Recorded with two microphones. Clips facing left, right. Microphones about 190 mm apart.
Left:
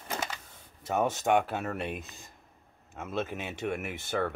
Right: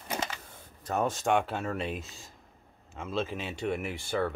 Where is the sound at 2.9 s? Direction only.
5° left (ahead or behind).